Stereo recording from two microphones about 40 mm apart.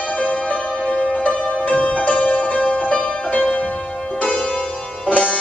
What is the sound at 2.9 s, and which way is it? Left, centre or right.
Music, left.